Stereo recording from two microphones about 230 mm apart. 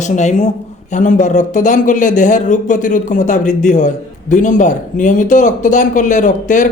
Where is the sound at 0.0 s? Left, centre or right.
Left.